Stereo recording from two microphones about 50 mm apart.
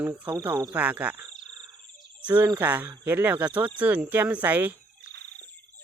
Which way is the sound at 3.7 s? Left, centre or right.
Right.